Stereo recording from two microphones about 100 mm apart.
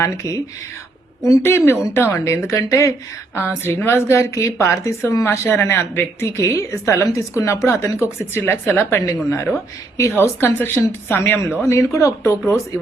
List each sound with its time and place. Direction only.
0.0 s a woman's voice: 30° left (ahead or behind)
3.6 s a woman's voice: 20° left (ahead or behind)